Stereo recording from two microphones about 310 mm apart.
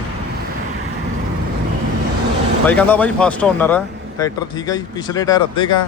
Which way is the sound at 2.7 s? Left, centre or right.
Centre.